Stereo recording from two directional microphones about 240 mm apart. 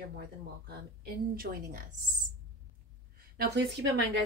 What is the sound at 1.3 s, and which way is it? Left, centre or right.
Speech, right.